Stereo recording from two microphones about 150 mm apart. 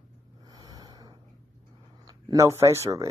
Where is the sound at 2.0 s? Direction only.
25° right (ahead or behind).